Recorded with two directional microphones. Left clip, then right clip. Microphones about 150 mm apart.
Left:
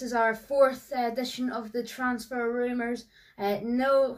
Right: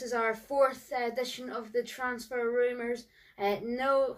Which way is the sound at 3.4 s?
15° right (ahead or behind).